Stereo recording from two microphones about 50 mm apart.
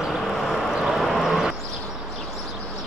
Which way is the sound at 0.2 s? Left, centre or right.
Centre.